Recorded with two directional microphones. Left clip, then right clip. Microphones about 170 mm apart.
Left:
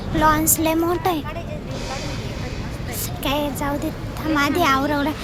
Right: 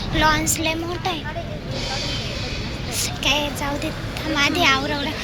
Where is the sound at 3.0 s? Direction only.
35° left (ahead or behind).